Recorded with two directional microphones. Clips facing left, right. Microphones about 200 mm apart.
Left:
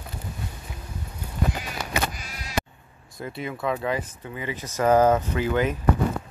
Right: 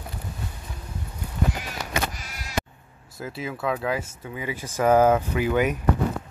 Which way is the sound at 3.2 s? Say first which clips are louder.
Even; 5° right (ahead or behind).